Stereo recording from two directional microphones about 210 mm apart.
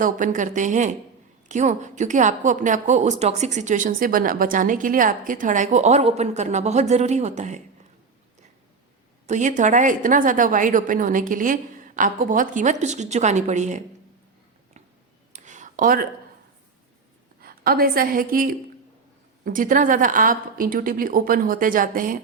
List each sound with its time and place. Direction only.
0.0 s a woman's voice: 40° right (ahead or behind)
9.2 s a woman's voice: 35° right (ahead or behind)
15.3 s a sound: 35° right (ahead or behind)
17.4 s a woman's voice: 45° right (ahead or behind)